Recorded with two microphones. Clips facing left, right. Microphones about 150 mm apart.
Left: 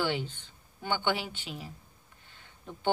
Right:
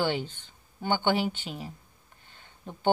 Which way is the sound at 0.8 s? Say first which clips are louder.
Right 5 dB; 30° right (ahead or behind).